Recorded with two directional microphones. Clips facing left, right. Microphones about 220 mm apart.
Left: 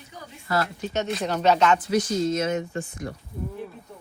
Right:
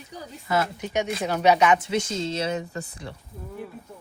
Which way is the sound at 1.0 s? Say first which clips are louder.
Right 1 dB; 5° right (ahead or behind).